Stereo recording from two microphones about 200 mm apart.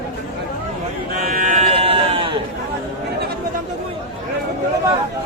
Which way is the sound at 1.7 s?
30° right (ahead or behind).